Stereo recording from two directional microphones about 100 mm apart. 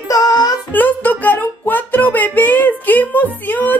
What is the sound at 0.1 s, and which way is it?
Music, 35° left (ahead or behind).